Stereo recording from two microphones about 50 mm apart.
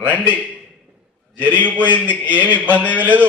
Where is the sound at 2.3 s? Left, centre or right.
Right.